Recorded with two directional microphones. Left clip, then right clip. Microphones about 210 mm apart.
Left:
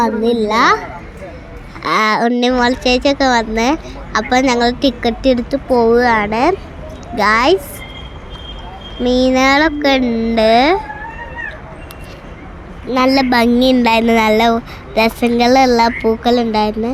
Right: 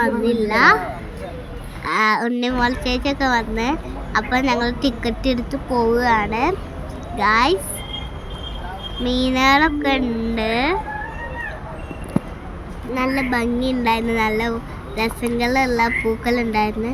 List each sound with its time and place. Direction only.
0.0 s a child's voice: 15° left (ahead or behind)
1.8 s a woman's voice: 20° left (ahead or behind)
9.0 s a woman's voice: 20° left (ahead or behind)
12.9 s a woman's voice: 45° left (ahead or behind); by 16.9 s 20° left (ahead or behind)